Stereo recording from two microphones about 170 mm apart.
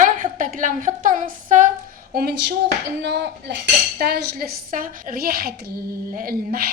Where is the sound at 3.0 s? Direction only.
90° right.